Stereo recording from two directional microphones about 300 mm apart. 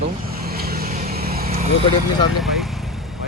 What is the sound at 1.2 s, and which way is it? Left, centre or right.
Vehicle, right.